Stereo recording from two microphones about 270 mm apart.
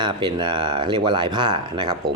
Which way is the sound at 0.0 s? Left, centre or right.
Centre.